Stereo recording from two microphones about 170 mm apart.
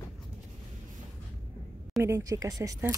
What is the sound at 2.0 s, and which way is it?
Speech, 20° right (ahead or behind).